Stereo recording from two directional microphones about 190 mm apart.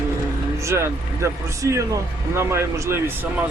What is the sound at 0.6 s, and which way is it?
Speech, 15° right (ahead or behind).